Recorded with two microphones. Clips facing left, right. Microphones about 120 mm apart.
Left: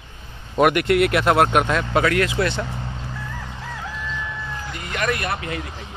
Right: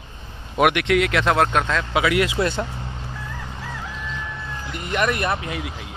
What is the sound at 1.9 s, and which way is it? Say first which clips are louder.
Speech: right 1 dB; 10° right (ahead or behind).